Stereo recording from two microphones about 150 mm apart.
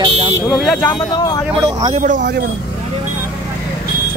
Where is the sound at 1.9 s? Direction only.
55° right (ahead or behind).